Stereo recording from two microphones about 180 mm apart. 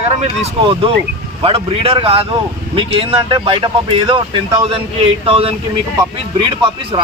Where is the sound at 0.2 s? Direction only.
35° right (ahead or behind).